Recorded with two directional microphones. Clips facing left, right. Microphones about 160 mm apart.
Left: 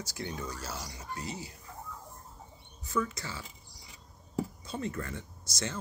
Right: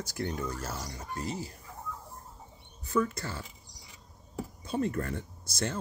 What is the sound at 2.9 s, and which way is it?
Speech, 55° right (ahead or behind).